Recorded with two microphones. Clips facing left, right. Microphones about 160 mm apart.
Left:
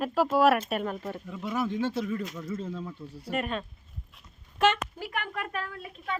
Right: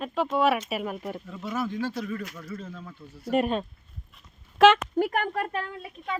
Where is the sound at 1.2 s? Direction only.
10° left (ahead or behind).